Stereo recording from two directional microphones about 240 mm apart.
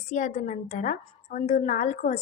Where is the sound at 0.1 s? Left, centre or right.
Left.